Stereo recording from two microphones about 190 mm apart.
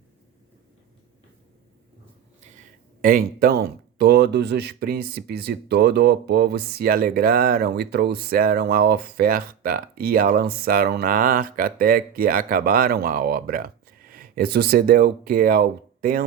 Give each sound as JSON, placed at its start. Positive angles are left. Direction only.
{"t": 3.0, "sound": "speech", "side_deg": -50}